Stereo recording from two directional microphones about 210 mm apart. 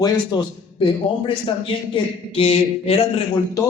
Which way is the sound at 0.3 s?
20° left (ahead or behind).